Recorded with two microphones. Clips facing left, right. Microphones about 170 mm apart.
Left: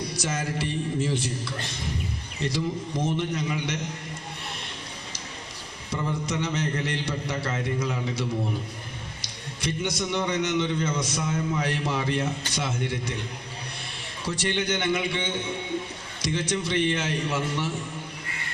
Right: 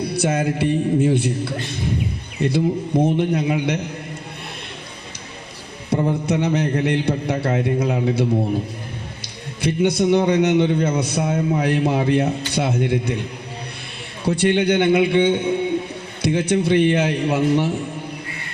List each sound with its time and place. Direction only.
0.0 s a man's voice: 60° right (ahead or behind)
5.9 s a man's voice: 55° right (ahead or behind)
9.6 s a man's voice: 60° right (ahead or behind)
14.3 s a man's voice: 60° right (ahead or behind)